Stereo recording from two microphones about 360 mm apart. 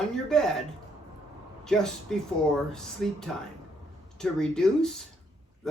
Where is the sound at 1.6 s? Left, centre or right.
Centre.